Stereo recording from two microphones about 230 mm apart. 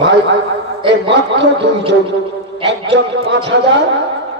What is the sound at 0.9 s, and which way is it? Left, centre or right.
Speech, right.